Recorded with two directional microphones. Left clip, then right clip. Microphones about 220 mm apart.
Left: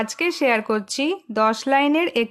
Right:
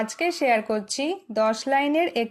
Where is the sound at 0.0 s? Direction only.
25° left (ahead or behind).